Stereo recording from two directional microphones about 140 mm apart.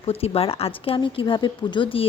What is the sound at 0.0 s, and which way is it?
A woman's voice, 45° left (ahead or behind).